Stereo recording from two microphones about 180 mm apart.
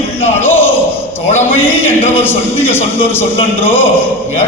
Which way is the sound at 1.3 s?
40° left (ahead or behind).